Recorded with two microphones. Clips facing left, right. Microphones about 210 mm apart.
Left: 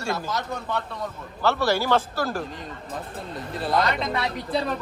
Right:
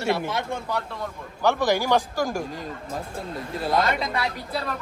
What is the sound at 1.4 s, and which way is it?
Speech, 15° right (ahead or behind).